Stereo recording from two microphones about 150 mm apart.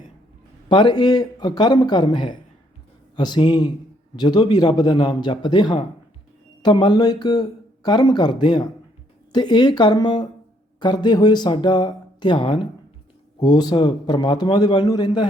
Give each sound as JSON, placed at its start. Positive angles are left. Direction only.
{"t": 0.7, "sound": "speech", "side_deg": 30}